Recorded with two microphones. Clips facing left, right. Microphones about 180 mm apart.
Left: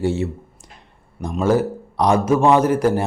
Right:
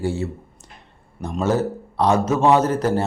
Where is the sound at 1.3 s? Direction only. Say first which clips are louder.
Left 3 dB; 10° left (ahead or behind).